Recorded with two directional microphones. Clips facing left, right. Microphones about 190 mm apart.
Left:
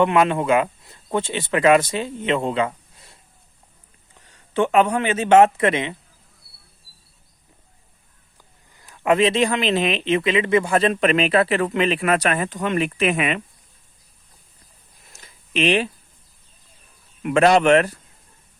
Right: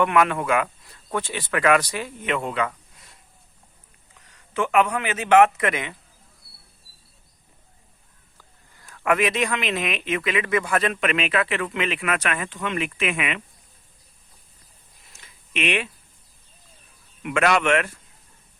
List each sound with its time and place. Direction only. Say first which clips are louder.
0.0 s speech: left 3 dB; 25° left (ahead or behind)
4.2 s a man's voice: left 5 dB; 30° left (ahead or behind)
8.8 s speech: left 4 dB; 20° left (ahead or behind)
15.1 s a sound: left 6 dB; 35° left (ahead or behind)
17.2 s speech: left 6 dB; 35° left (ahead or behind)